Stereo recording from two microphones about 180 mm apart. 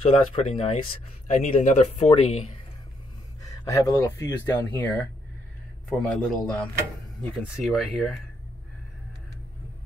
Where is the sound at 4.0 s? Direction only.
15° left (ahead or behind).